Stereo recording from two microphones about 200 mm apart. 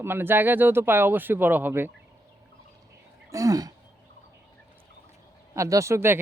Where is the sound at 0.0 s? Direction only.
10° right (ahead or behind).